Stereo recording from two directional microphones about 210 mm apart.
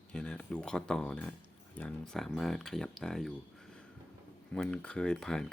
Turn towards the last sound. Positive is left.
turn(degrees=5)  # may be behind; listen again after turning